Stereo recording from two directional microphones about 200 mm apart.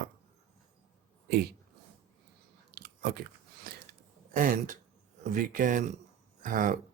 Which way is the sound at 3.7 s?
50° right (ahead or behind).